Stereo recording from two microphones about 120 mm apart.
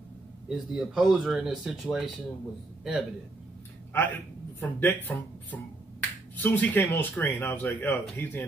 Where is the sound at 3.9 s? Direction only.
20° left (ahead or behind).